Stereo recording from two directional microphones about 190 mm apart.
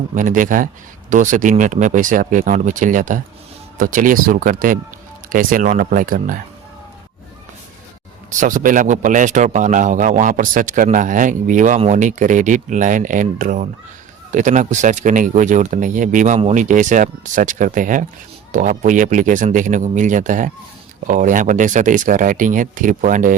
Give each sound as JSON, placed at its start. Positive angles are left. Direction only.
{"t": 0.1, "sound": "speech", "side_deg": -45}
{"t": 8.3, "sound": "speech", "side_deg": -40}